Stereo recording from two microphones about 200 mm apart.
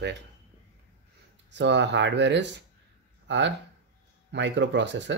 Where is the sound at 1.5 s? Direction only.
60° right (ahead or behind).